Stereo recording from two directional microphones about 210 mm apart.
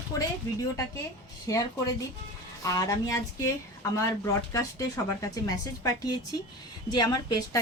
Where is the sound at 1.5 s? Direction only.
15° left (ahead or behind).